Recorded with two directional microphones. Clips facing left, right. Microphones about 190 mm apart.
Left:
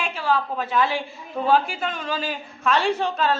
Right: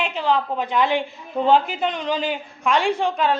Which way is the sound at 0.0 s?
20° right (ahead or behind).